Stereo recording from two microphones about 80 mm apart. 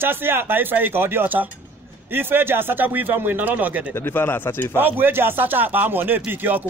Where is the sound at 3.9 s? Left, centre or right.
Left.